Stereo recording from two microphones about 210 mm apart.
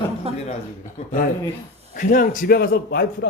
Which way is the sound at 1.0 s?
30° left (ahead or behind).